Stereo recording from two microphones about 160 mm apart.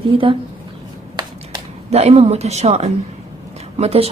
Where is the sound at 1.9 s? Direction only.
40° right (ahead or behind).